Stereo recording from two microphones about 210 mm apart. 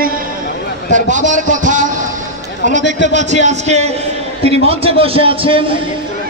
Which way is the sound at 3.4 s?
30° right (ahead or behind).